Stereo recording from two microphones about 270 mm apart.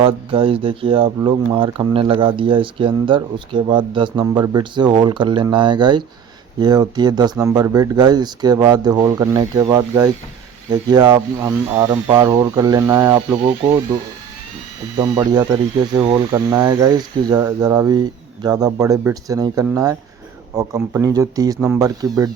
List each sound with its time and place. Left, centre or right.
0.0 s speech: centre
14.9 s speech: centre